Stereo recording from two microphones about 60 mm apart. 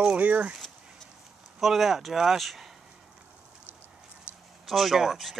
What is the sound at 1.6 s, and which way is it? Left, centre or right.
Speech, centre.